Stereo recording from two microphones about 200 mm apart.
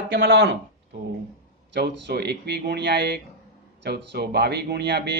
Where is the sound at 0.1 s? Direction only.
65° right (ahead or behind).